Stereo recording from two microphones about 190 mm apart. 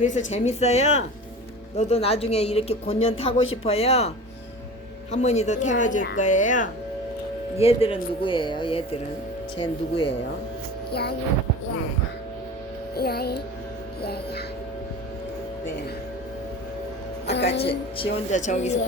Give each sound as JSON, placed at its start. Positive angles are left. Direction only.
{"t": 0.0, "sound": "speech", "side_deg": 40}
{"t": 5.1, "sound": "speech", "side_deg": 35}
{"t": 7.5, "sound": "speech", "side_deg": 30}
{"t": 13.0, "sound": "music", "side_deg": 55}
{"t": 14.0, "sound": "speech", "side_deg": 55}
{"t": 17.2, "sound": "music", "side_deg": 65}
{"t": 17.7, "sound": "speech", "side_deg": 30}